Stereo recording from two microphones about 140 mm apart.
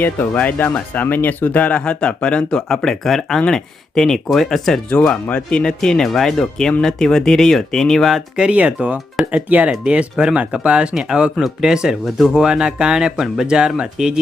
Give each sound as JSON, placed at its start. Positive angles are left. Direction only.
{"t": 0.0, "sound": "speech", "side_deg": 10}